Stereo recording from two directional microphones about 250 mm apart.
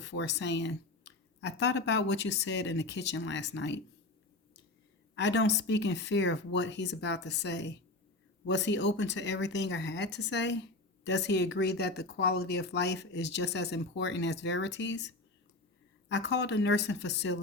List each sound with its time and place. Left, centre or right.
0.0 s speech: left
5.1 s speech: left